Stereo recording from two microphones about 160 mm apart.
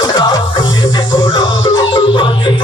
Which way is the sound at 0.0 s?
25° left (ahead or behind).